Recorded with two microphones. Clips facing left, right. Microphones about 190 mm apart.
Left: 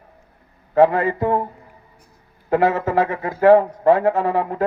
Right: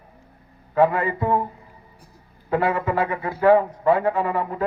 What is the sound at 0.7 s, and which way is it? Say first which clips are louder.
Speech: left 4 dB; 40° left (ahead or behind).